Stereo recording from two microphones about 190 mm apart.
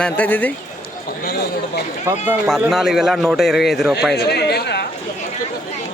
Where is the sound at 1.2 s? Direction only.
55° left (ahead or behind).